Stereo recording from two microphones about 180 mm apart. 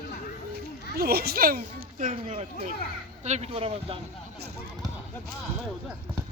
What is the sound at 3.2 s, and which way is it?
Speech, 40° right (ahead or behind).